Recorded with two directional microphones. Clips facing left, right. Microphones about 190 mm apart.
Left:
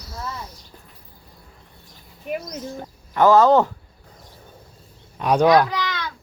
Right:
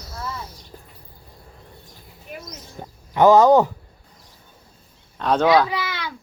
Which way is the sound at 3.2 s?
15° right (ahead or behind).